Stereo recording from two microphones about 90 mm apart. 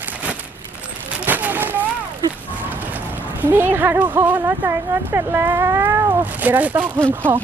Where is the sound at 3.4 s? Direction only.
20° right (ahead or behind).